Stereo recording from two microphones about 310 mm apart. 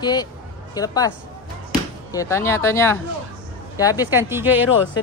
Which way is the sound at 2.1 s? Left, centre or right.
Centre.